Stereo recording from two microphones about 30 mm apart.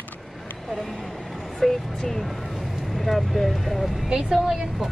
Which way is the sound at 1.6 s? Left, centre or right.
Centre.